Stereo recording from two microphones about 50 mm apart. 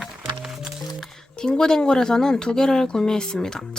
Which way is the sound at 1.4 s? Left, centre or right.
Centre.